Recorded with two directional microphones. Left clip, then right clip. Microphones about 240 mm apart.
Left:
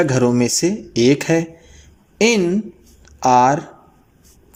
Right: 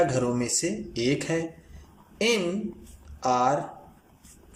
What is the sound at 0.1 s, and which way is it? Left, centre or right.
Speech, left.